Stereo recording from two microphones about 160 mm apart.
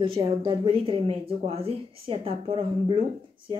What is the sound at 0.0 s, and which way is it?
Speech, 35° right (ahead or behind).